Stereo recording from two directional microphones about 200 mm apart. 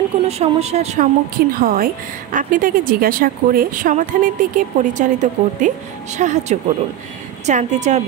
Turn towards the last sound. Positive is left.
turn(degrees=-35)  # may be behind; listen again after turning